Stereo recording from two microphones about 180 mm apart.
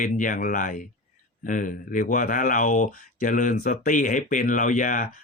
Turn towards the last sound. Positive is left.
turn(degrees=45)  # may be behind; listen again after turning